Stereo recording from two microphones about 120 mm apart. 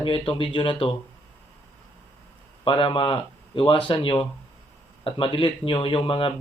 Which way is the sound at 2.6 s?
45° left (ahead or behind).